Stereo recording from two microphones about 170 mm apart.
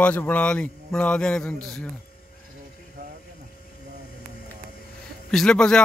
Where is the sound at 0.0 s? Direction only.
10° left (ahead or behind).